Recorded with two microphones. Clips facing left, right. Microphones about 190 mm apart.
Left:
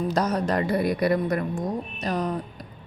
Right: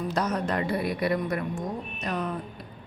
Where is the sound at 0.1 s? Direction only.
35° left (ahead or behind).